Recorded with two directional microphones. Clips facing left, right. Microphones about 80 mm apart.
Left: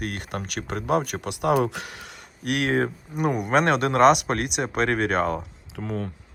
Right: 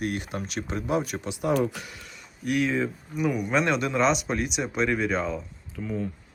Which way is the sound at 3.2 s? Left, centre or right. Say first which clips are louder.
Left 3 dB; left.